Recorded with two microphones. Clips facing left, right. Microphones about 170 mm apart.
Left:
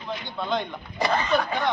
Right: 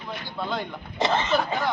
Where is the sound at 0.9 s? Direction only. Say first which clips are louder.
Right 1 dB; 25° right (ahead or behind).